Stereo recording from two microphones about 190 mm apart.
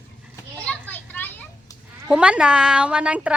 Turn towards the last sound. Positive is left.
turn(degrees=-5)  # may be behind; listen again after turning